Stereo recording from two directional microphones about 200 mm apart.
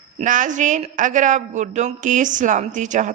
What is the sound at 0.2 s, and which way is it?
Speech, 40° right (ahead or behind).